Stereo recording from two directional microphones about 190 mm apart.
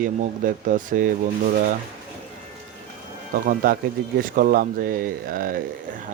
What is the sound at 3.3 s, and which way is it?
Speech, 50° right (ahead or behind).